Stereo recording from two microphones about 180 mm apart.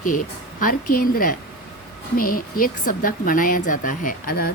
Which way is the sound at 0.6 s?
50° left (ahead or behind).